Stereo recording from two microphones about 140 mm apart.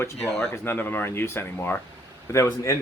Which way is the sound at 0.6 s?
15° left (ahead or behind).